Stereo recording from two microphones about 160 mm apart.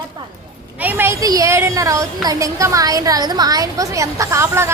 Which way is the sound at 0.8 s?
10° right (ahead or behind).